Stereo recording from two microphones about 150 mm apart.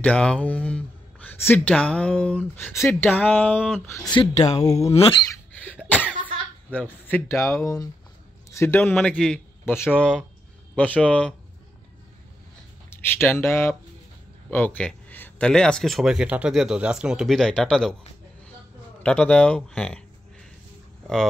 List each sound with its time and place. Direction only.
0.0 s speech: 5° left (ahead or behind)
3.5 s speech: 5° right (ahead or behind)
3.8 s speech: 15° left (ahead or behind)
4.1 s speech: 35° left (ahead or behind)
4.5 s speech: 25° left (ahead or behind)
4.9 s speech: 40° left (ahead or behind)
6.7 s a man's voice: 10° left (ahead or behind)
12.9 s speech: 15° left (ahead or behind)
19.0 s speech: 5° left (ahead or behind)